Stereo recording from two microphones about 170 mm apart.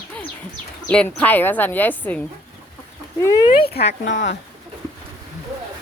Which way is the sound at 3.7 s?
85° left.